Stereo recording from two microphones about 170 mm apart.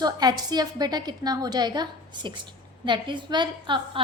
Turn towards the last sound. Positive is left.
turn(degrees=-25)  # may be behind; listen again after turning